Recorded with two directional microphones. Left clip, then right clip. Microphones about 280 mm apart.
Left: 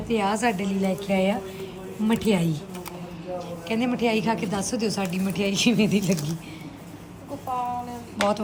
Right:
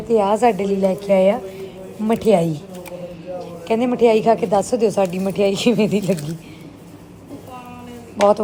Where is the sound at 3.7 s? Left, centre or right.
Centre.